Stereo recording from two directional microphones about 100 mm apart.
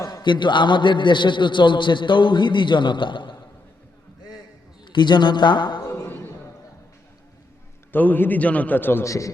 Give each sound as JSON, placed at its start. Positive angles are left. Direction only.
{"t": 0.0, "sound": "a man's voice", "side_deg": 45}
{"t": 4.9, "sound": "a man's voice", "side_deg": 50}
{"t": 6.1, "sound": "a sound", "side_deg": 20}
{"t": 7.9, "sound": "a man's voice", "side_deg": 20}